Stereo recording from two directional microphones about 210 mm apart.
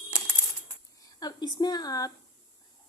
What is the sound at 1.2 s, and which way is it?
Speech, 20° left (ahead or behind).